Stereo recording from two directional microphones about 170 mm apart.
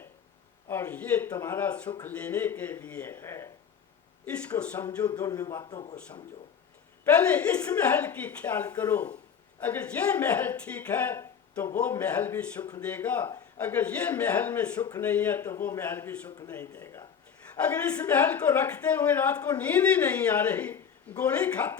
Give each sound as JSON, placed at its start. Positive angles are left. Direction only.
{"t": 0.7, "sound": "speech", "side_deg": 15}
{"t": 4.6, "sound": "speech", "side_deg": 10}
{"t": 5.0, "sound": "speech", "side_deg": 20}
{"t": 7.0, "sound": "speech", "side_deg": 10}
{"t": 17.6, "sound": "speech", "side_deg": 5}